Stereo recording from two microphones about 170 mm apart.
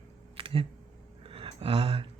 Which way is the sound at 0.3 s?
30° right (ahead or behind).